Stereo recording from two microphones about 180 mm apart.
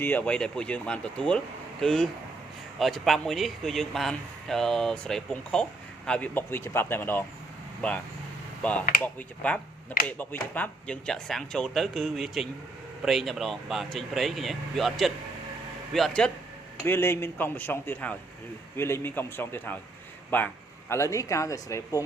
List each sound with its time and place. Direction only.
0.0 s a man's voice: 10° left (ahead or behind)
9.1 s a man's voice: 5° left (ahead or behind)